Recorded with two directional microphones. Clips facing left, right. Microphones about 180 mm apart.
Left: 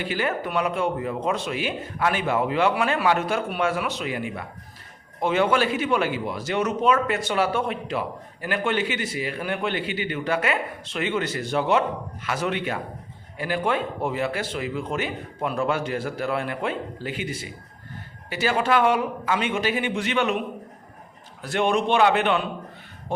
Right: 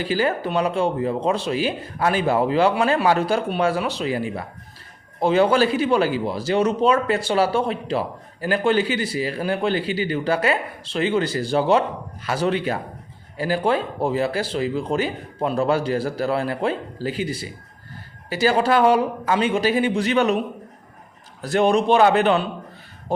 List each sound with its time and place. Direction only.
0.0 s a man's voice: 35° right (ahead or behind)
21.4 s a man's voice: 35° right (ahead or behind)